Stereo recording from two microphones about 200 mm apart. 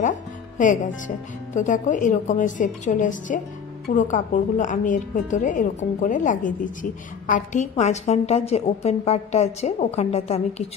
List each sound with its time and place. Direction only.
0.6 s a woman's voice: 40° left (ahead or behind)